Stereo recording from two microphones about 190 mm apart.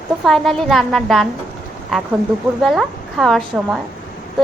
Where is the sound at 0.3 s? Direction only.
Centre (ahead or behind).